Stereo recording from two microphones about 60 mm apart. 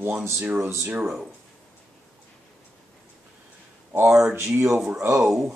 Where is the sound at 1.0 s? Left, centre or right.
Centre.